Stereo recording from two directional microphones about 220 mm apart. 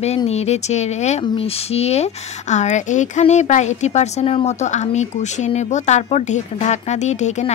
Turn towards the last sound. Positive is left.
turn(degrees=30)  # may be behind; listen again after turning